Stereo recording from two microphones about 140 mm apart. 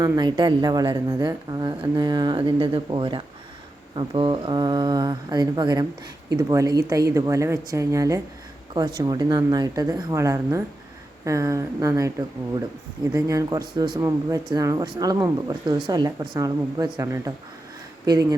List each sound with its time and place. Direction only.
0.0 s a woman's voice: 30° right (ahead or behind)
13.1 s a woman's voice: 25° right (ahead or behind)